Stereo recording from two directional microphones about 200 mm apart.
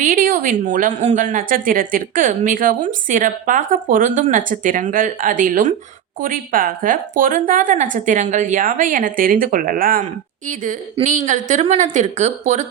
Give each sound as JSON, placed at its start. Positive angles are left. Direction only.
{"t": 0.0, "sound": "a woman's voice", "side_deg": -45}